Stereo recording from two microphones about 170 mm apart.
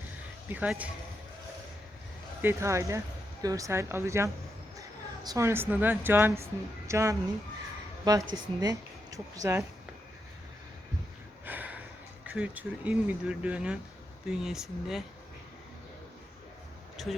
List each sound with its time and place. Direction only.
0.4 s speech: 10° right (ahead or behind)
2.4 s speech: 15° right (ahead or behind)
11.4 s snort: 10° right (ahead or behind)
12.2 s speech: 10° right (ahead or behind)
17.0 s a sound: centre (ahead or behind)